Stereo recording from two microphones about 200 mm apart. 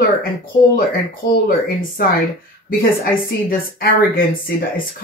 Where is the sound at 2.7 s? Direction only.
50° left (ahead or behind).